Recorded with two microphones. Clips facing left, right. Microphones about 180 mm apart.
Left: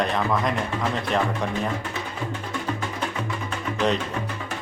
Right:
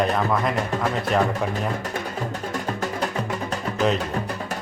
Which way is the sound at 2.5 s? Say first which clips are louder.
Right 2 dB; 40° right (ahead or behind).